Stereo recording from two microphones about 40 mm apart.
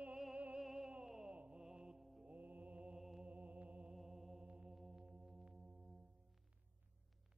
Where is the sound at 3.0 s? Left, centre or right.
Centre.